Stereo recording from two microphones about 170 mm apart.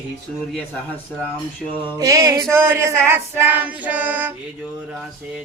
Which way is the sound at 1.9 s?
20° right (ahead or behind).